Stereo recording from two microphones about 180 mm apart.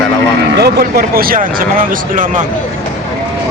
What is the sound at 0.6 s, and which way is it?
Speech, 60° right (ahead or behind).